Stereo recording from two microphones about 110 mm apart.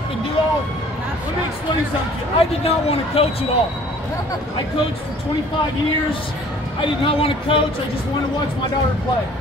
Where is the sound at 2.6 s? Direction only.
65° left (ahead or behind).